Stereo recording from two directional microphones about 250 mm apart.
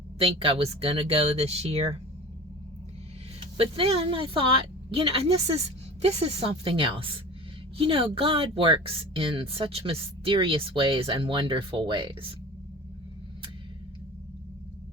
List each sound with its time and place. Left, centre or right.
0.2 s speech: right
3.4 s speech: right